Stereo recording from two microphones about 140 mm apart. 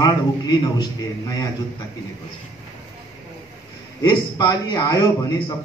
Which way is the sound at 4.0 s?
30° left (ahead or behind).